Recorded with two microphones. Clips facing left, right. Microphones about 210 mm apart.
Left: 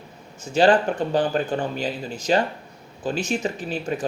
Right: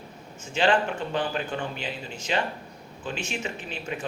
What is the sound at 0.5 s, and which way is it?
Speech, 40° left (ahead or behind).